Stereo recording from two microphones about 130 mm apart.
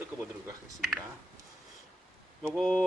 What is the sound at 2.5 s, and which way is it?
Speech, 5° left (ahead or behind).